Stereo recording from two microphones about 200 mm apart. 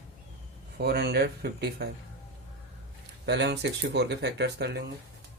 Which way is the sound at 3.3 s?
55° right (ahead or behind).